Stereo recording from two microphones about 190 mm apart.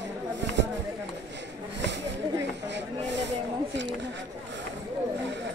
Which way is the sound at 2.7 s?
70° right (ahead or behind).